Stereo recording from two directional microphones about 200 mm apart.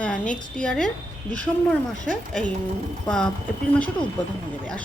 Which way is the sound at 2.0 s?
5° left (ahead or behind).